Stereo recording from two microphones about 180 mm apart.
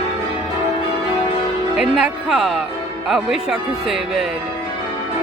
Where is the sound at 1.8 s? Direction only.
5° right (ahead or behind).